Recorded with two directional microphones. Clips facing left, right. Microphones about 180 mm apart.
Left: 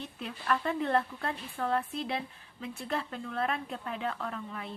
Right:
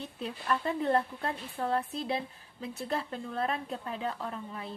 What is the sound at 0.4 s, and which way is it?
Speech, 35° right (ahead or behind).